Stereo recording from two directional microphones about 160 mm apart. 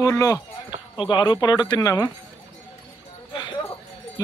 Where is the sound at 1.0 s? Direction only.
30° left (ahead or behind).